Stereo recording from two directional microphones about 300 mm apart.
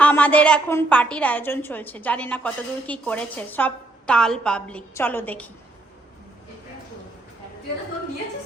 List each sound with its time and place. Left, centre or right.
0.0 s a woman's voice: centre